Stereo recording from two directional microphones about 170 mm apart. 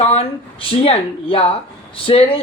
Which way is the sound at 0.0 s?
35° left (ahead or behind).